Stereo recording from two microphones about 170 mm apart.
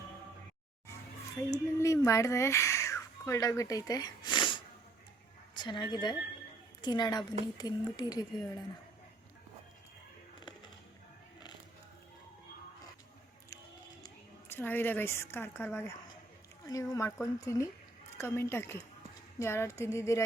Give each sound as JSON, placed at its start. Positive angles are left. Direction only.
{"t": 1.4, "sound": "a child's voice", "side_deg": 20}
{"t": 14.5, "sound": "speech", "side_deg": 10}